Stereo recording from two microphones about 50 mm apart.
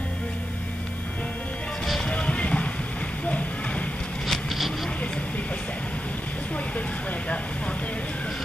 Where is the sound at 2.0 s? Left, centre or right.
Left.